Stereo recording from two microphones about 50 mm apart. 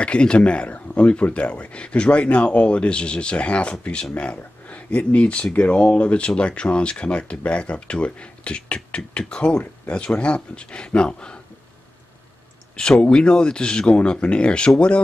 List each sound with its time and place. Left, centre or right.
0.0 s speech: left
12.7 s speech: centre